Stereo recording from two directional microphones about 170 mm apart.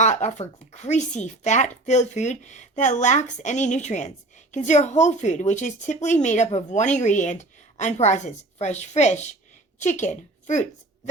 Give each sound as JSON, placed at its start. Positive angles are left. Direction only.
{"t": 0.0, "sound": "a woman's voice", "side_deg": 45}